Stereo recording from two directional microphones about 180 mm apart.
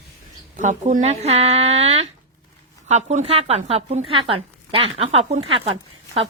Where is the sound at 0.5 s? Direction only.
40° right (ahead or behind).